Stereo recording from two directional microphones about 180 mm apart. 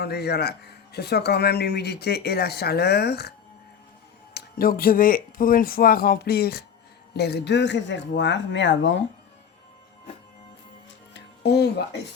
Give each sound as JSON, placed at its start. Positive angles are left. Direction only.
{"t": 0.0, "sound": "speech", "side_deg": 65}
{"t": 4.4, "sound": "speech", "side_deg": 55}
{"t": 11.1, "sound": "music", "side_deg": 65}